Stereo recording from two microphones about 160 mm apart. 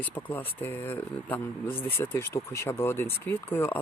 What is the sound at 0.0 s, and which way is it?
Speech, 10° left (ahead or behind).